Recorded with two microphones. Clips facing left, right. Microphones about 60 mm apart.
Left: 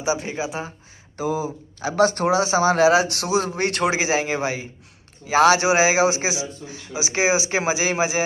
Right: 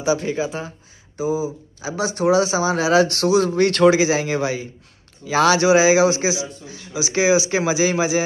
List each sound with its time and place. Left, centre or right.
0.0 s a man's voice: left
1.1 s speech: left
2.2 s speech: left
3.2 s a man's voice: left